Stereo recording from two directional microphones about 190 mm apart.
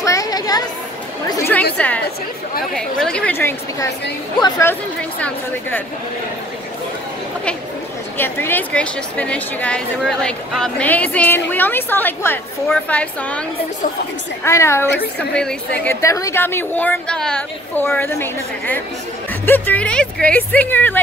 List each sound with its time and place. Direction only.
0.0 s a sound: 15° left (ahead or behind)
1.8 s a woman's voice: 5° left (ahead or behind)
8.2 s a woman's voice: 10° left (ahead or behind)
14.4 s a woman's voice: 15° left (ahead or behind)